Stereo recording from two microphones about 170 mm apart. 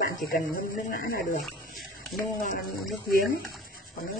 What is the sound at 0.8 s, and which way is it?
Speech, 55° left (ahead or behind).